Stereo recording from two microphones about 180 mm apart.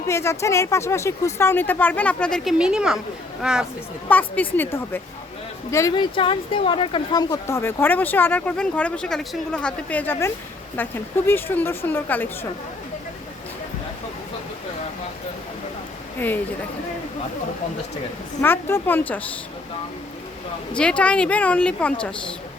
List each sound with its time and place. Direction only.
0.1 s speech: 15° left (ahead or behind); by 3.7 s 5° right (ahead or behind)
4.1 s speech: 10° left (ahead or behind)
6.1 s speech: 30° left (ahead or behind); by 12.5 s 10° left (ahead or behind)
18.4 s speech: 10° left (ahead or behind)
20.7 s speech: 5° left (ahead or behind)